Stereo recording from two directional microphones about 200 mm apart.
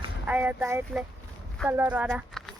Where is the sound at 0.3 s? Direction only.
10° right (ahead or behind).